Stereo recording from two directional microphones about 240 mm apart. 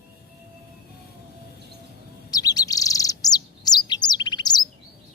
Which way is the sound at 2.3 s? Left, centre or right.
Centre.